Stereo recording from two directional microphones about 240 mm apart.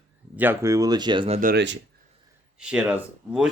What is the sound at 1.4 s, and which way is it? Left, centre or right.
Speech, right.